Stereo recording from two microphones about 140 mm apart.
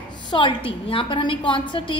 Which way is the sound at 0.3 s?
35° left (ahead or behind).